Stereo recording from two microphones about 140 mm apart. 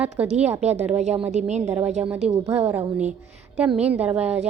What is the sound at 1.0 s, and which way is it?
A woman's voice, 50° right (ahead or behind).